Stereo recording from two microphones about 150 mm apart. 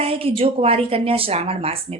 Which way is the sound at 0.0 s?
40° right (ahead or behind).